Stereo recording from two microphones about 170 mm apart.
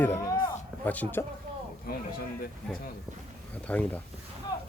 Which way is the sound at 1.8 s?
60° left (ahead or behind).